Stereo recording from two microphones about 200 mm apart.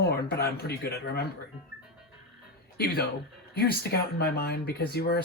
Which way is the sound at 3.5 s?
50° left (ahead or behind).